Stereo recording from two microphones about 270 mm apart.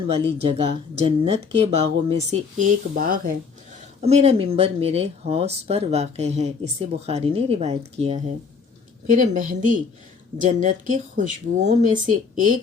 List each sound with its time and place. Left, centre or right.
0.1 s speech: right